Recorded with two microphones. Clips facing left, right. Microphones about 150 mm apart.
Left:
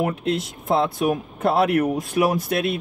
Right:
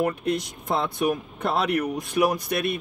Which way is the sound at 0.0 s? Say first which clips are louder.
Left 1 dB; 5° left (ahead or behind).